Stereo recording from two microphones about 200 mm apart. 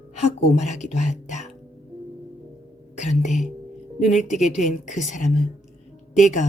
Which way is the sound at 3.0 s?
35° left (ahead or behind).